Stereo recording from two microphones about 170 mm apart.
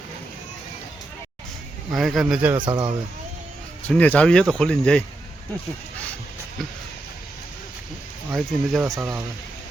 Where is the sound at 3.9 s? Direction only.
10° left (ahead or behind).